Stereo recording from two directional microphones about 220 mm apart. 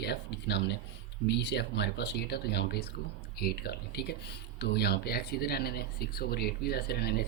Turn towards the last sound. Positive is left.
turn(degrees=45)  # may be behind; listen again after turning